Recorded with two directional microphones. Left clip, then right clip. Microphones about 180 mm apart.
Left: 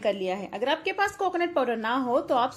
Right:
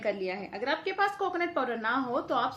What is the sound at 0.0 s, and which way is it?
A woman's voice, 35° left (ahead or behind).